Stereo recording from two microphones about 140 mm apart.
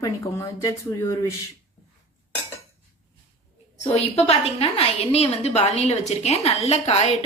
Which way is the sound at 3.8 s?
50° left (ahead or behind).